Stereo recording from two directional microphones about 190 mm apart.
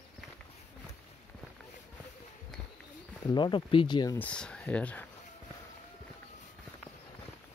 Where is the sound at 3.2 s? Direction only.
25° left (ahead or behind).